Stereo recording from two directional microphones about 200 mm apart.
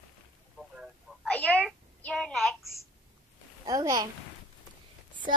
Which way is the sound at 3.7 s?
15° right (ahead or behind).